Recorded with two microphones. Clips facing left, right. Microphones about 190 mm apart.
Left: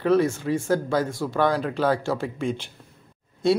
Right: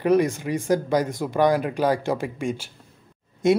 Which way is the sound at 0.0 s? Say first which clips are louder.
Right 1 dB; 15° right (ahead or behind).